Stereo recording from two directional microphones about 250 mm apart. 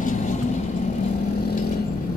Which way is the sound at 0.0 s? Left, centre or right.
Left.